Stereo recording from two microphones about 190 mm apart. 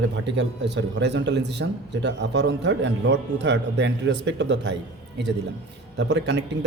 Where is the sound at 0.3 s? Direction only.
65° right (ahead or behind).